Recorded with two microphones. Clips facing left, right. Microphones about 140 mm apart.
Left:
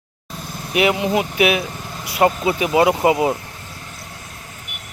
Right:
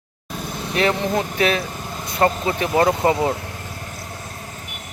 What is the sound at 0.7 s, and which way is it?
Speech, 10° left (ahead or behind).